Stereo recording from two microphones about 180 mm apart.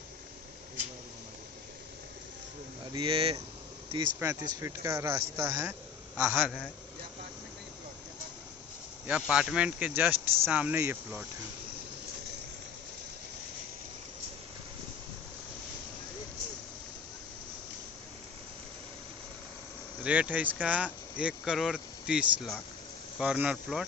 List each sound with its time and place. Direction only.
2.9 s speech: 30° right (ahead or behind)
4.2 s a man's voice: 15° right (ahead or behind)
9.0 s speech: 5° right (ahead or behind)
20.0 s speech: 5° right (ahead or behind)